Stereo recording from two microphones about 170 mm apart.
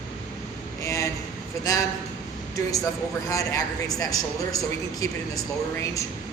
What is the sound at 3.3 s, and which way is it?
Speech, 20° left (ahead or behind).